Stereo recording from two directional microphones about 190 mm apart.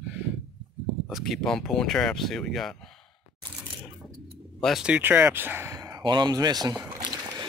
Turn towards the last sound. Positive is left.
turn(degrees=-25)  # may be behind; listen again after turning